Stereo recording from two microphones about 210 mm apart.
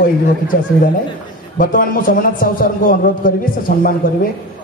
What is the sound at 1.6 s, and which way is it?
A man's voice, 40° left (ahead or behind).